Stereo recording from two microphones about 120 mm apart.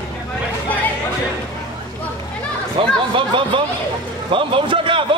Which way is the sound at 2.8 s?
50° right (ahead or behind).